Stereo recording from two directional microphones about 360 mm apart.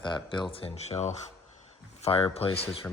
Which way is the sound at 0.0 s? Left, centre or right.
Centre.